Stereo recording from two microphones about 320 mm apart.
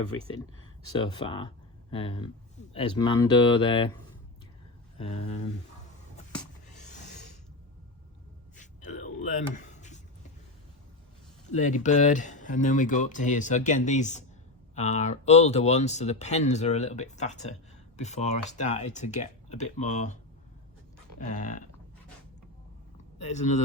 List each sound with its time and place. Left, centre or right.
0.9 s speech: centre
4.9 s speech: centre
6.3 s a sound: left
8.5 s a sound: left
11.5 s speech: left
21.2 s speech: left
23.1 s speech: left